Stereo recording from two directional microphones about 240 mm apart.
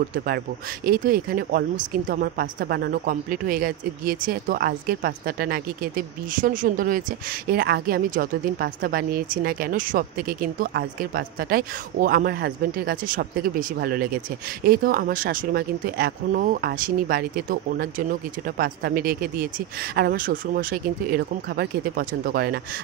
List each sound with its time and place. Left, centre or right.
0.8 s a woman's voice: right